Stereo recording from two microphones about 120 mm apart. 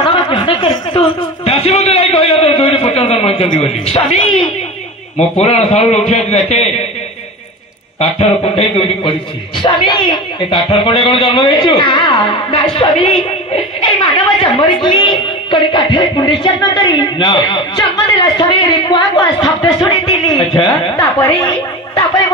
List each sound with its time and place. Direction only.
0.0 s a sound: 45° left (ahead or behind)
3.5 s a man's voice: 60° left (ahead or behind)
8.0 s a man's voice: 50° left (ahead or behind)
13.7 s music: 45° left (ahead or behind)
15.5 s a woman's voice: 45° left (ahead or behind)